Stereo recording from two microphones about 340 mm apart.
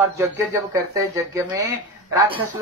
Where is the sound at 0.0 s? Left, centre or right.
Centre.